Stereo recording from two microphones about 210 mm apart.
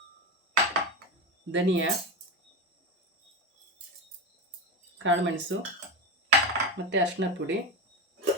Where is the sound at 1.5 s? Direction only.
65° right (ahead or behind).